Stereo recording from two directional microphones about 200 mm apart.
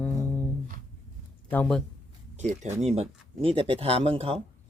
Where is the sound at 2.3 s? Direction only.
35° right (ahead or behind).